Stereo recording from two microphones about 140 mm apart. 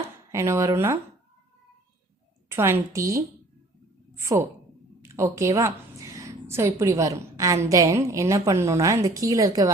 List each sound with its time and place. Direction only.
0.3 s a woman's voice: 20° right (ahead or behind)
2.5 s a woman's voice: 20° right (ahead or behind)